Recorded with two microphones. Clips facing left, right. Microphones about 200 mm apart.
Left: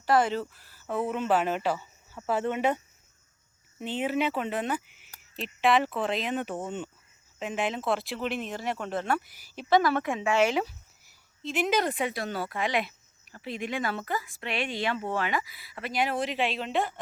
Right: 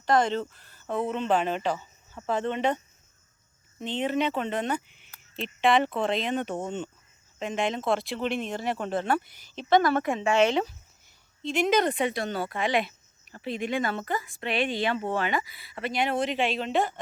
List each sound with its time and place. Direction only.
0.0 s speech: 5° left (ahead or behind)
8.7 s speech: 30° right (ahead or behind)
9.0 s speech: 5° left (ahead or behind)